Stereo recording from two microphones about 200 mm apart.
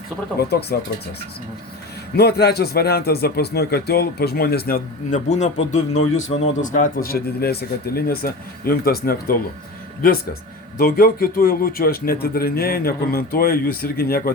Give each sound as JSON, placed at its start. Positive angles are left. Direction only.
{"t": 0.3, "sound": "speech", "side_deg": 55}
{"t": 2.1, "sound": "speech", "side_deg": 50}
{"t": 5.3, "sound": "a man's voice", "side_deg": 35}
{"t": 5.9, "sound": "a man's voice", "side_deg": 90}
{"t": 6.6, "sound": "speech", "side_deg": 40}
{"t": 10.8, "sound": "speech", "side_deg": 50}